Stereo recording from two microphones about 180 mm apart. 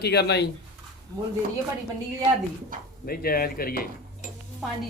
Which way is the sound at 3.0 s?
55° left (ahead or behind).